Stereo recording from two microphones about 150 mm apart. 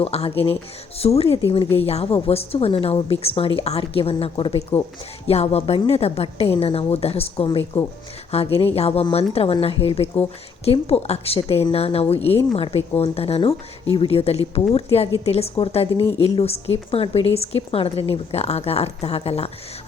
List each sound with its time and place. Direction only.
0.0 s a woman's voice: 45° left (ahead or behind)